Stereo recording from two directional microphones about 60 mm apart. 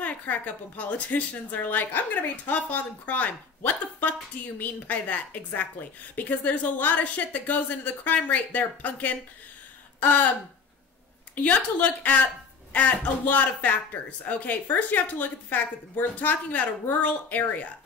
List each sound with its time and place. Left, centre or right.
0.0 s a woman's voice: left
9.9 s a sound: left
11.3 s a woman's voice: left